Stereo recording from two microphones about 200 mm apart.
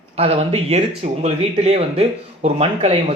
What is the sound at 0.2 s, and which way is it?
Speech, 30° right (ahead or behind).